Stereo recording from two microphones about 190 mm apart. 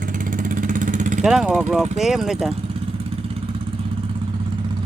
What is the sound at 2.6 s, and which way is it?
Vehicle, 30° right (ahead or behind).